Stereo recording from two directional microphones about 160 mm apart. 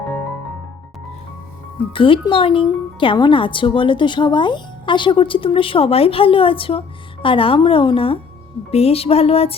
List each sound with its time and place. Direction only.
1.9 s speech: 35° left (ahead or behind)